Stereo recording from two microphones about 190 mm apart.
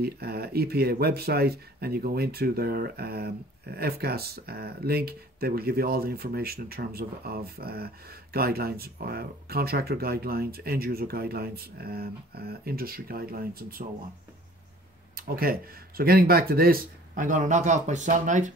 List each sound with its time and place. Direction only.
0.0 s speech: 55° right (ahead or behind)
15.1 s speech: 50° right (ahead or behind)